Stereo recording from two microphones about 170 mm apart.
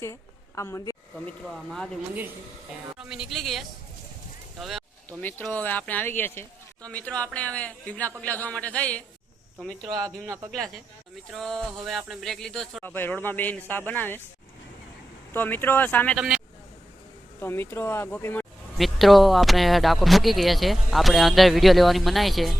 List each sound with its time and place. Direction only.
0.0 s a woman's voice: 15° left (ahead or behind)
1.5 s speech: centre (ahead or behind)
3.0 s speech: 5° right (ahead or behind)
5.2 s speech: 10° left (ahead or behind)
11.3 s speech: centre (ahead or behind)
15.3 s speech: 10° left (ahead or behind)
16.1 s speech: 5° right (ahead or behind)
17.4 s speech: 15° left (ahead or behind)
18.8 s speech: centre (ahead or behind)